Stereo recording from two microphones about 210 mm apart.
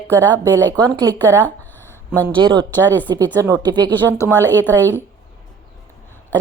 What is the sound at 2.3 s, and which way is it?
Speech, 25° right (ahead or behind).